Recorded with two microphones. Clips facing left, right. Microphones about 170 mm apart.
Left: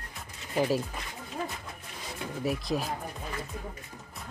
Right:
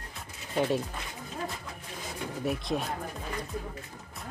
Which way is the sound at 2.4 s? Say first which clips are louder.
Left 1 dB; centre (ahead or behind).